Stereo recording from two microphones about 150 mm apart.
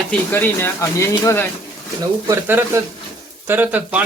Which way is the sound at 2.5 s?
15° right (ahead or behind).